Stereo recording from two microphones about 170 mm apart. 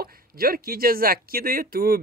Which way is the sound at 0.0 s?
60° right (ahead or behind).